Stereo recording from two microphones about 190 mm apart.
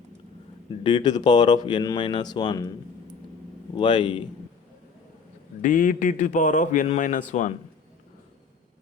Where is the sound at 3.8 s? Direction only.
25° left (ahead or behind).